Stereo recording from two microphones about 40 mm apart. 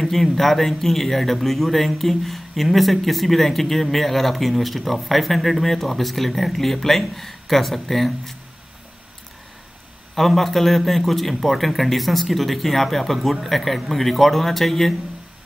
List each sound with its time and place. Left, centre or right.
0.0 s speech: centre
10.1 s speech: centre